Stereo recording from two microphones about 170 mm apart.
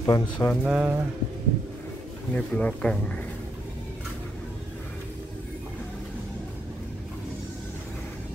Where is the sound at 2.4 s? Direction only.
5° left (ahead or behind).